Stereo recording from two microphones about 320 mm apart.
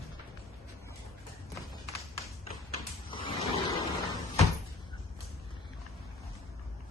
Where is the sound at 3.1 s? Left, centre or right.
Centre.